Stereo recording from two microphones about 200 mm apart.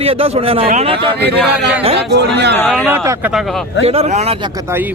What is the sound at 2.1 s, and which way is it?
Speech, 55° right (ahead or behind).